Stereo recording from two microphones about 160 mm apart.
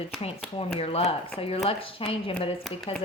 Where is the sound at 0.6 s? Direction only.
40° left (ahead or behind).